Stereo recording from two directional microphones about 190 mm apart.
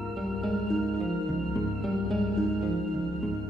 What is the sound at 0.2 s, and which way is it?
Music, centre (ahead or behind).